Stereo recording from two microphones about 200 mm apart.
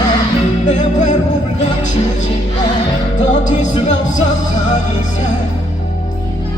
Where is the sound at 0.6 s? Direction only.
35° left (ahead or behind).